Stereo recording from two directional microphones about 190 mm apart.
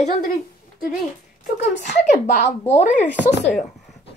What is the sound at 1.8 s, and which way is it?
Speech, 40° left (ahead or behind).